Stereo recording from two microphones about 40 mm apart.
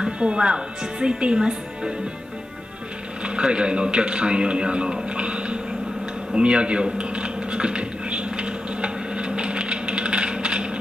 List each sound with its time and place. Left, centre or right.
0.0 s speech: right
3.3 s a man's voice: right
6.3 s a sound: right